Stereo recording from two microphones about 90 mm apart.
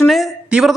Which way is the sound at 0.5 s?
10° right (ahead or behind).